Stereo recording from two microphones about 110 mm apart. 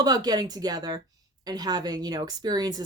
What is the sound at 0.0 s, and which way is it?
A woman's voice, 35° right (ahead or behind).